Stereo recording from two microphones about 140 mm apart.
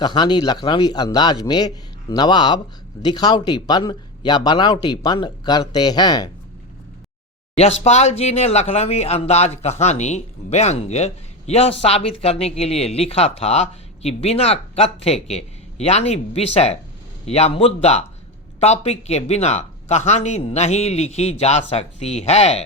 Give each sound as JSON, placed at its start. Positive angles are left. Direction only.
{"t": 0.0, "sound": "speech", "side_deg": 30}
{"t": 7.5, "sound": "speech", "side_deg": 50}